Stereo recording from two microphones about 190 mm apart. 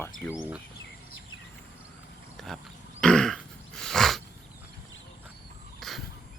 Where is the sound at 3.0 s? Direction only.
5° left (ahead or behind).